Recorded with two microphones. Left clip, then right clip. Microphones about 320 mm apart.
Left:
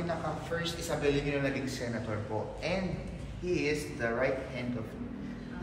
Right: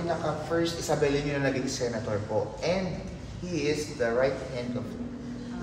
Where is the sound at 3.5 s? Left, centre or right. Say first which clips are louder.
Right 5 dB; right.